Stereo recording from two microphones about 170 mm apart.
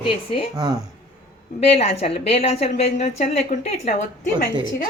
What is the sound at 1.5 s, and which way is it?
A woman's voice, 35° left (ahead or behind).